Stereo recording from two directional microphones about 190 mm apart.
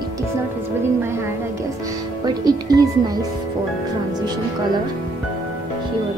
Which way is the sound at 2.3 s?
20° right (ahead or behind).